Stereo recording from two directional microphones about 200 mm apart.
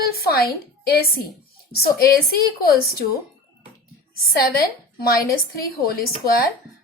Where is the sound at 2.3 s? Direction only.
50° left (ahead or behind).